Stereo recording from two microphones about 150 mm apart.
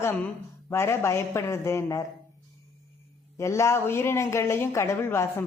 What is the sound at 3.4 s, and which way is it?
Speech, 20° left (ahead or behind).